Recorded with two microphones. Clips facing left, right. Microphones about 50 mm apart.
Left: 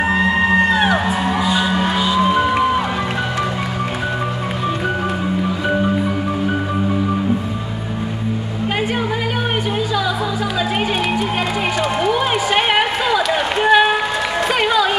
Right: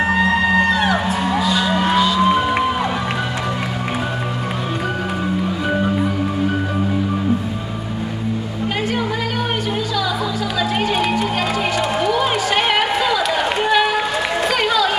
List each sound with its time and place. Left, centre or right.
0.2 s music: left
1.7 s music: centre
12.0 s run: centre
14.6 s a sound: centre